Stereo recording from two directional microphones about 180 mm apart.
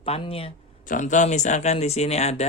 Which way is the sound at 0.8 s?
45° left (ahead or behind).